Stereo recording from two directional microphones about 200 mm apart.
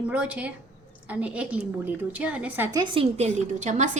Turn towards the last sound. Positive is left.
turn(degrees=-35)  # may be behind; listen again after turning